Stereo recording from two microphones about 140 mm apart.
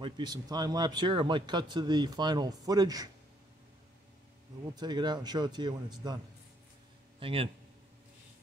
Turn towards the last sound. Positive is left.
turn(degrees=-40)  # may be behind; listen again after turning